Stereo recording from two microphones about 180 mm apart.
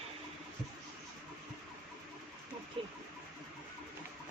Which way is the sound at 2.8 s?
30° right (ahead or behind).